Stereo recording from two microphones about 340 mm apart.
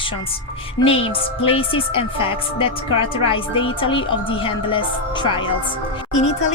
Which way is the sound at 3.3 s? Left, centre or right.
Centre.